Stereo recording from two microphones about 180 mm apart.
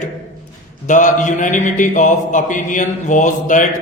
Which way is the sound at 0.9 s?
45° left (ahead or behind).